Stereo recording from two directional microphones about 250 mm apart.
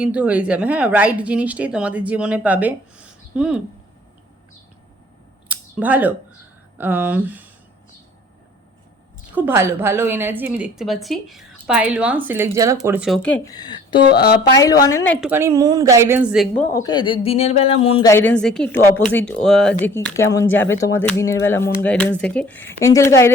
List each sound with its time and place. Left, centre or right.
0.0 s speech: centre
5.5 s a sound: centre
6.7 s a woman's voice: centre
9.3 s a woman's voice: centre
14.1 s speech: left
14.5 s speech: centre
15.3 s a woman's voice: centre
16.7 s speech: centre
18.1 s speech: centre